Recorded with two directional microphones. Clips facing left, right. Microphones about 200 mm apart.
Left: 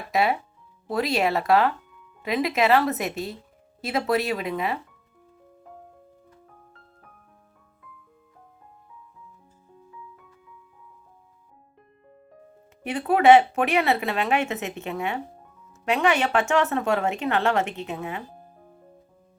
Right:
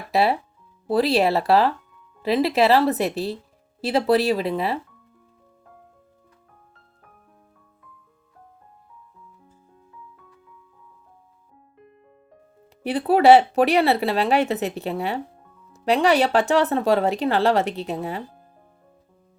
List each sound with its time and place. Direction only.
0.1 s speech: 35° right (ahead or behind)
12.8 s speech: 35° right (ahead or behind)